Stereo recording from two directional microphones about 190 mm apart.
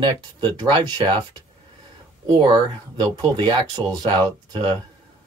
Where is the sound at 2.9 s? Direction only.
25° right (ahead or behind).